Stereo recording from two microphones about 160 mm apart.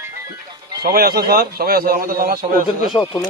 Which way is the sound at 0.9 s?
70° right (ahead or behind).